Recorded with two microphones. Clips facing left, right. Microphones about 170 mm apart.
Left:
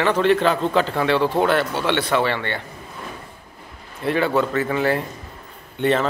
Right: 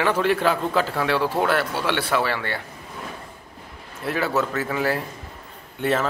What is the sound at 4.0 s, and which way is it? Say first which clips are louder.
A man's voice: left 4 dB; 5° right (ahead or behind).